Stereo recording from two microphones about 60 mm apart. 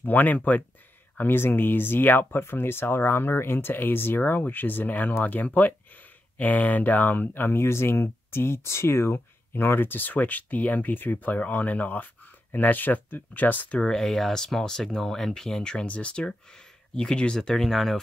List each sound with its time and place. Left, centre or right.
0.0 s speech: left
13.8 s speech: centre